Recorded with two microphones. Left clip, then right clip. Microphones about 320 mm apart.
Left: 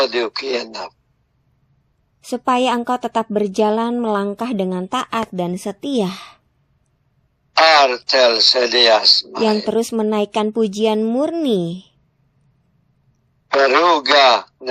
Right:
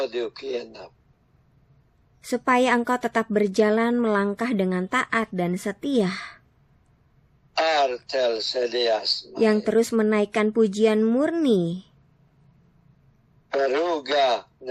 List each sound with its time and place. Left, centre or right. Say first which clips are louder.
0.0 s speech: left 9 dB; left
2.2 s a woman's voice: left 4 dB; centre
7.5 s speech: left 10 dB; left
9.6 s a woman's voice: left 2 dB; centre
13.5 s speech: left 10 dB; left